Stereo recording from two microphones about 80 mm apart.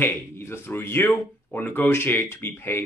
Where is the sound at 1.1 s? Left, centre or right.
Centre.